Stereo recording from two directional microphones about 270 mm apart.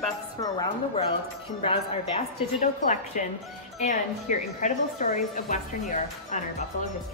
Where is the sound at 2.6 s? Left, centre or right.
Left.